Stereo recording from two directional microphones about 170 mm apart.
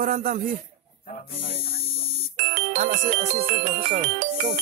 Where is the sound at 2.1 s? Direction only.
40° right (ahead or behind).